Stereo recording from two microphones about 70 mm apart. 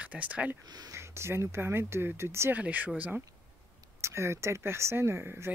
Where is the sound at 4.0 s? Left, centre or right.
Right.